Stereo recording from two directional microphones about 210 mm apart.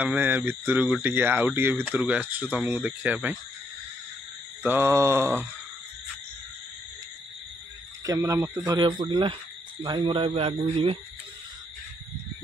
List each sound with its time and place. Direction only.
0.0 s speech: 10° right (ahead or behind)
4.6 s speech: 10° right (ahead or behind)
8.0 s speech: 15° right (ahead or behind)